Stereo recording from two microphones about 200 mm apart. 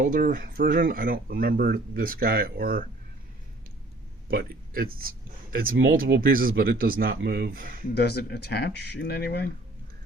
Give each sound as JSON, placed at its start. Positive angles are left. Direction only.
{"t": 0.0, "sound": "speech", "side_deg": -40}
{"t": 4.3, "sound": "speech", "side_deg": -45}
{"t": 7.9, "sound": "speech", "side_deg": 55}